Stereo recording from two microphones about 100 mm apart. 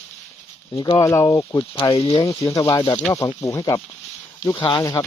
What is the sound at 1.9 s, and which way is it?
Speech, 75° left (ahead or behind).